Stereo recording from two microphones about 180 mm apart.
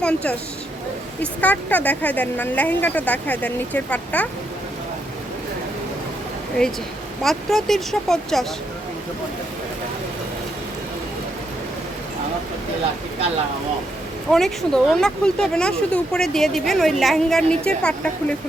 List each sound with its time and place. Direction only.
0.0 s speech: 5° left (ahead or behind)
7.2 s speech: centre (ahead or behind)
14.3 s speech: centre (ahead or behind)